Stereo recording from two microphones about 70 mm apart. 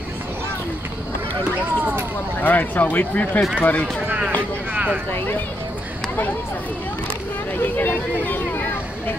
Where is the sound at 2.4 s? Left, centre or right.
Left.